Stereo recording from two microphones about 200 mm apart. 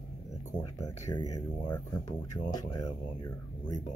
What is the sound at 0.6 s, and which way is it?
Speech, 15° left (ahead or behind).